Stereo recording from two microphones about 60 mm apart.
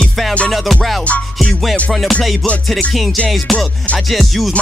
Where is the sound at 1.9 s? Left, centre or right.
Centre.